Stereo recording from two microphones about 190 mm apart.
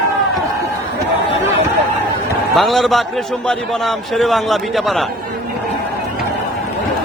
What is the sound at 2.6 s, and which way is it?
A man's voice, centre (ahead or behind).